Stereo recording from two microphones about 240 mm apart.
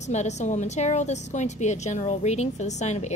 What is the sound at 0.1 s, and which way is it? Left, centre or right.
A woman's voice, left.